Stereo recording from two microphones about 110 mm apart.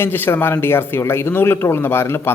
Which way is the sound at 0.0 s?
20° left (ahead or behind).